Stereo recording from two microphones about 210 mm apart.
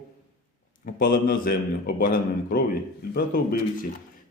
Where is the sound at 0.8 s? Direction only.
45° left (ahead or behind).